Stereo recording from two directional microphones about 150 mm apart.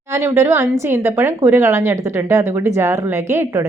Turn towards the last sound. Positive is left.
turn(degrees=-15)  # may be behind; listen again after turning